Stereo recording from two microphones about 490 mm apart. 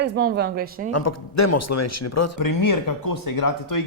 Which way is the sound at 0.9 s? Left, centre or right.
Left.